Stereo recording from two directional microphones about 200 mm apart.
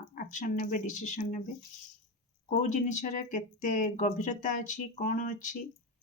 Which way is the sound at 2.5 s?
40° left (ahead or behind).